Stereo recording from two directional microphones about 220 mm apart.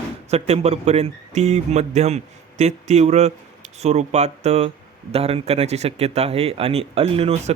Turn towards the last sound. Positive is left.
turn(degrees=-25)  # may be behind; listen again after turning